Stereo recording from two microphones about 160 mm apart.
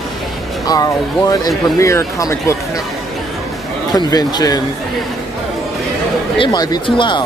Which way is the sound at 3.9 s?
25° left (ahead or behind).